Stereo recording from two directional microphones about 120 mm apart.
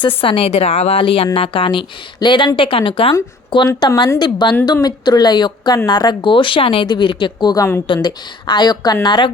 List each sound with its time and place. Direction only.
0.2 s a woman's voice: 50° left (ahead or behind)